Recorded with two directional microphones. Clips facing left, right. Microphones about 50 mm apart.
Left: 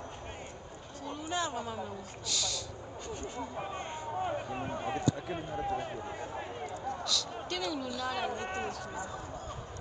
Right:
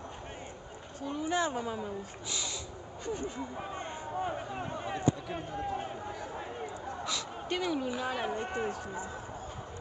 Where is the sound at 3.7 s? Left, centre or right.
Left.